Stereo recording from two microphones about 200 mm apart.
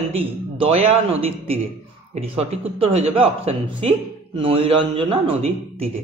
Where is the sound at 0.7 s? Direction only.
30° right (ahead or behind).